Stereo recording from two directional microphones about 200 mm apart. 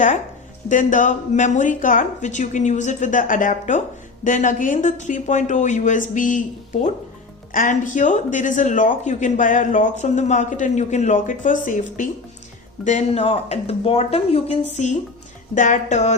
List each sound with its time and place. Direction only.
0.7 s speech: 40° left (ahead or behind)
7.5 s speech: 40° left (ahead or behind)